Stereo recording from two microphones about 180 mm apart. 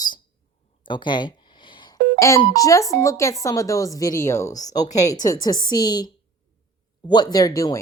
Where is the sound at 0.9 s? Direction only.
25° left (ahead or behind).